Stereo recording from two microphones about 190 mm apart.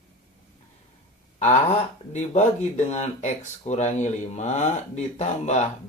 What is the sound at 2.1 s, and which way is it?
Speech, 35° left (ahead or behind).